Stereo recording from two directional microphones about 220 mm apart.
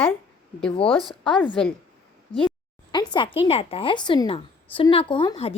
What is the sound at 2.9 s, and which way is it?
A woman's voice, 20° left (ahead or behind).